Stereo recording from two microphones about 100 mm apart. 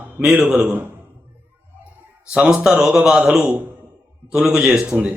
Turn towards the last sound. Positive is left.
turn(degrees=-10)  # may be behind; listen again after turning